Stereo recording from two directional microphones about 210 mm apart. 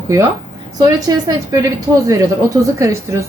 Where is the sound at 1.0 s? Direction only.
15° right (ahead or behind).